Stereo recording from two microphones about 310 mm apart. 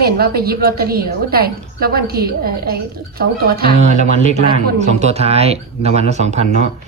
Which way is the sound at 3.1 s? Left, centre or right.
Right.